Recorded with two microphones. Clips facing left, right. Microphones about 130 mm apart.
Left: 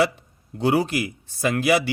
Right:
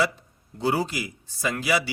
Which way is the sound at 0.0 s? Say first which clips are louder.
Left 4 dB; 65° left (ahead or behind).